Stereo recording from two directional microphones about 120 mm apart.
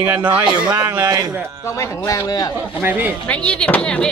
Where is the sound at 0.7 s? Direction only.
30° right (ahead or behind).